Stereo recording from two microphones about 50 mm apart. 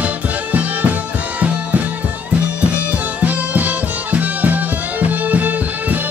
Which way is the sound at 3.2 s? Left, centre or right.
Right.